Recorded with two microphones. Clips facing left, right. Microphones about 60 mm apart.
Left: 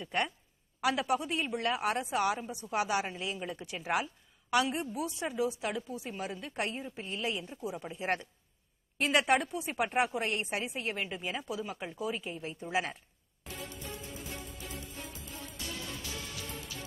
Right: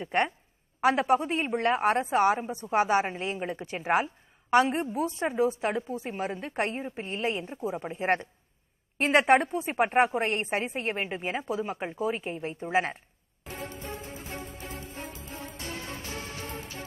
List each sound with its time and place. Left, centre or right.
0.0 s a woman's voice: right
13.5 s music: right